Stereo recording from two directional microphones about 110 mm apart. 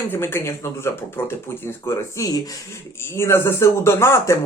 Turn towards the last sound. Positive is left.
turn(degrees=25)  # may be behind; listen again after turning